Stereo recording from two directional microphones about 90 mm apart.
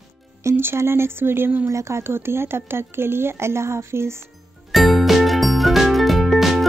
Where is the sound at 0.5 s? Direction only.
30° right (ahead or behind).